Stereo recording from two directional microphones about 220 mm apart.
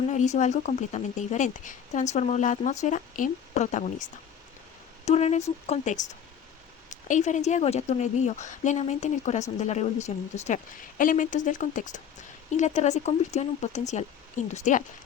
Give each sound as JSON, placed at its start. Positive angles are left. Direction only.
{"t": 0.1, "sound": "a woman's voice", "side_deg": 35}
{"t": 5.0, "sound": "a woman's voice", "side_deg": 30}